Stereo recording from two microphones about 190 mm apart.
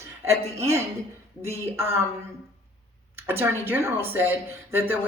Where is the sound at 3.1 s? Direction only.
10° right (ahead or behind).